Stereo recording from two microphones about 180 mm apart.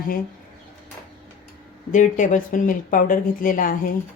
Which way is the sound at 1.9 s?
45° left (ahead or behind).